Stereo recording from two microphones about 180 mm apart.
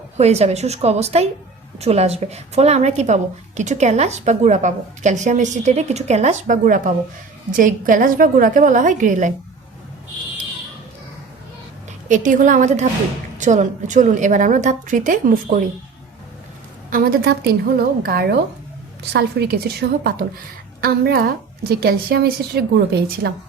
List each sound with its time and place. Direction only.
0.2 s a woman's voice: 35° right (ahead or behind)
12.0 s a woman's voice: 45° right (ahead or behind)
16.9 s a woman's voice: 55° right (ahead or behind)